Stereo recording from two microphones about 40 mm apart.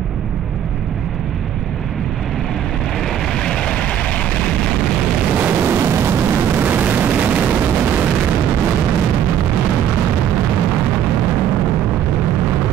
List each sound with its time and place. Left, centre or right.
3.4 s vehicle: centre
5.6 s vehicle: right
6.6 s a sound: right